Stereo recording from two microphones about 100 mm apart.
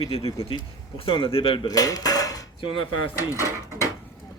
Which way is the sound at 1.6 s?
40° left (ahead or behind).